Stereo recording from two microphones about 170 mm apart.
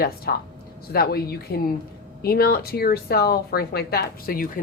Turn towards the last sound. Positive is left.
turn(degrees=60)  # may be behind; listen again after turning